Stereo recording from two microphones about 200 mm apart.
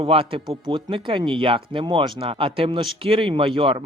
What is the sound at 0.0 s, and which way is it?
Speech, 25° right (ahead or behind).